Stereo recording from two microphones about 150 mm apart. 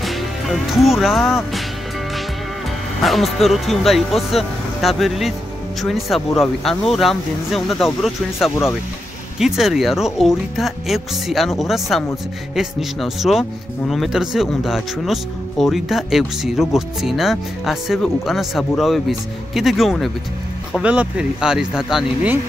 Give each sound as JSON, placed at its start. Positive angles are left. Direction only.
{"t": 0.0, "sound": "speech", "side_deg": 0}
{"t": 3.0, "sound": "speech", "side_deg": 0}